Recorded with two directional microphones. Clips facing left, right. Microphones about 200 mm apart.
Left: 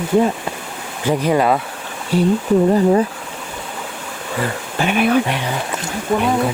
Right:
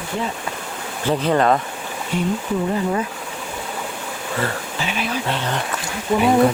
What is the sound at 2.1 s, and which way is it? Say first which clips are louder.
Speech: left 7 dB; 35° left (ahead or behind).